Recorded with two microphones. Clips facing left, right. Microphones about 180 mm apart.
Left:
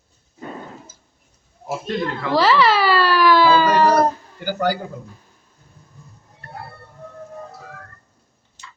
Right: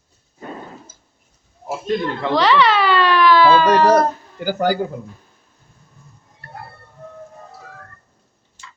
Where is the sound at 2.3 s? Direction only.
5° left (ahead or behind).